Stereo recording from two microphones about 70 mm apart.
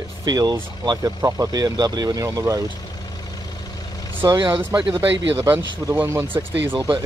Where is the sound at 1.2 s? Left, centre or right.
Right.